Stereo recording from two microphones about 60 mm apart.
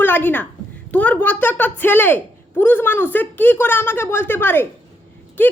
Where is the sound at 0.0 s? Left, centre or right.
Left.